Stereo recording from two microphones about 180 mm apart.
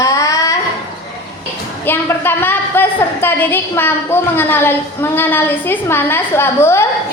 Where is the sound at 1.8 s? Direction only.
10° left (ahead or behind).